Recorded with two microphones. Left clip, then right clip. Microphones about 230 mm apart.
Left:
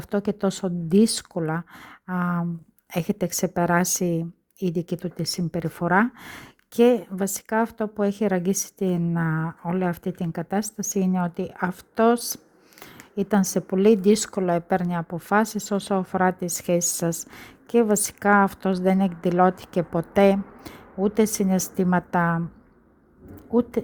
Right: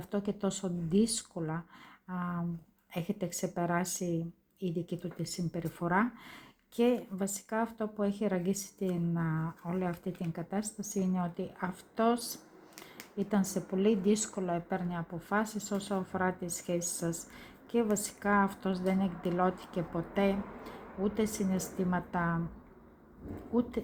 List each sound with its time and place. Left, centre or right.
0.0 s speech: left
23.5 s speech: left